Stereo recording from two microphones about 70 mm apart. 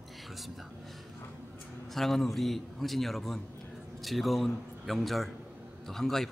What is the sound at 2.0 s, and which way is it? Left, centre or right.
A man's voice, centre.